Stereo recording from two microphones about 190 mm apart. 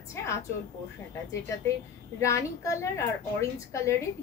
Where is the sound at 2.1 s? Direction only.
15° left (ahead or behind).